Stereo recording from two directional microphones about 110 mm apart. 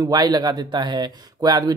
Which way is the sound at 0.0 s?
35° right (ahead or behind).